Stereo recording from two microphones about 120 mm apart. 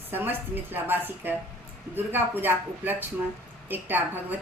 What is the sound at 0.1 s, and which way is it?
A woman's voice, 15° right (ahead or behind).